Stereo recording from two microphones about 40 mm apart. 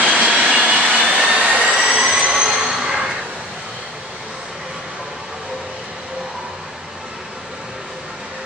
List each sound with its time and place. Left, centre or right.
0.1 s vehicle: right
1.0 s jet engine: right
2.0 s a sound: centre